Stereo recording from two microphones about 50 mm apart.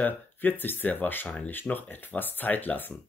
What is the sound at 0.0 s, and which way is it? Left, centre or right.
Speech, left.